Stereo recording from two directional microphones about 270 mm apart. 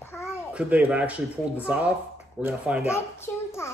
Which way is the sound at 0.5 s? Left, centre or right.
Centre.